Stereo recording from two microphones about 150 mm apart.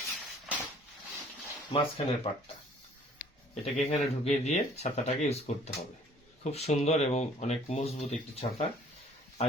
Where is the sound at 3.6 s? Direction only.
45° left (ahead or behind).